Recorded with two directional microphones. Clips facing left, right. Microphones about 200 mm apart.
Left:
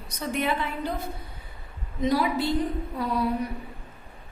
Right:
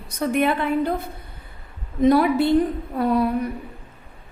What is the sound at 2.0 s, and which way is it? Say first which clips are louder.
Speech: right 8 dB; 55° right (ahead or behind).